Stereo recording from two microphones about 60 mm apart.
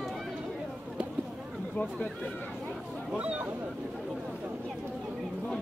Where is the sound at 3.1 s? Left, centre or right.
Right.